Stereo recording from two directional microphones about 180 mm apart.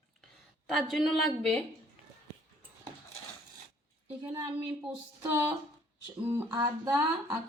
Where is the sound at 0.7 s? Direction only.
Centre (ahead or behind).